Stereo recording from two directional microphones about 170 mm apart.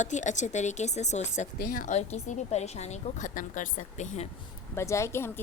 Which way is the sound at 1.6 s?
55° left (ahead or behind).